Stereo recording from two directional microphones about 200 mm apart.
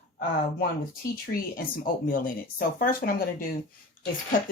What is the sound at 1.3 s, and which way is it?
Speech, 45° left (ahead or behind).